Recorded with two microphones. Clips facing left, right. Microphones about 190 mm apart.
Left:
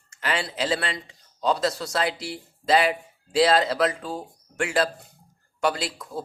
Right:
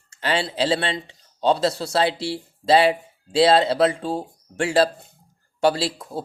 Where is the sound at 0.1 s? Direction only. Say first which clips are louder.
Right 4 dB; 30° right (ahead or behind).